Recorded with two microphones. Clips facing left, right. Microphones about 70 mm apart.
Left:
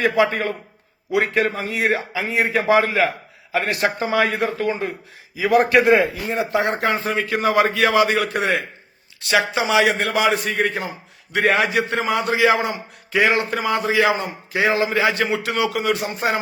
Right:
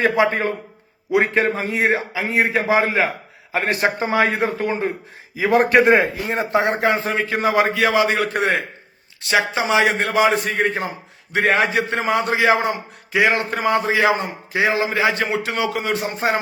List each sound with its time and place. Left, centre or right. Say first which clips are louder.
0.0 s a man's voice: right 1 dB; right
8.3 s a man's voice: right 1 dB; right